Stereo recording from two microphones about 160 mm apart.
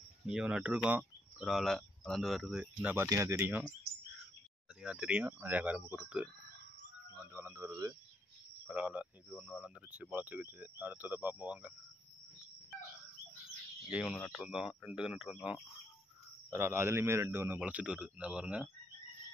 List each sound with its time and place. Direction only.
0.3 s speech: 5° right (ahead or behind)
4.8 s speech: 5° right (ahead or behind)
8.6 s speech: 10° right (ahead or behind)
13.8 s speech: 5° right (ahead or behind)
14.1 s speech: 10° left (ahead or behind)
14.4 s speech: 5° right (ahead or behind)
16.4 s speech: 15° right (ahead or behind)